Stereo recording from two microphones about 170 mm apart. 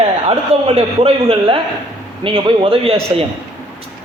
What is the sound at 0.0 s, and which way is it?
A man's voice, 35° right (ahead or behind).